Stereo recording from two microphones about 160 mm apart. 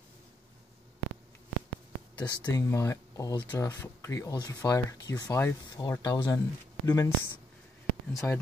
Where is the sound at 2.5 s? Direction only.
15° left (ahead or behind).